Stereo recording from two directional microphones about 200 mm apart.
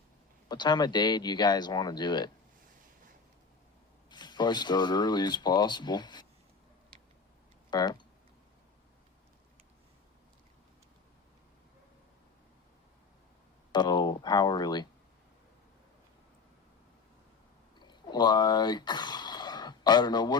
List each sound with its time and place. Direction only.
0.4 s speech: 20° left (ahead or behind)
4.1 s speech: 20° left (ahead or behind)
7.7 s speech: 20° left (ahead or behind)
13.7 s speech: 20° left (ahead or behind)
17.7 s a sound: 20° left (ahead or behind)